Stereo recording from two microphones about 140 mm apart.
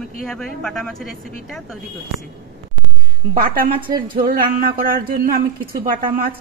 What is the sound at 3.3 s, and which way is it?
Speech, 90° right.